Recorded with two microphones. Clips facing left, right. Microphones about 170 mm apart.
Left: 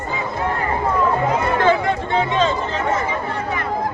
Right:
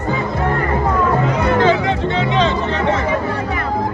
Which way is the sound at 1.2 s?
75° right (ahead or behind).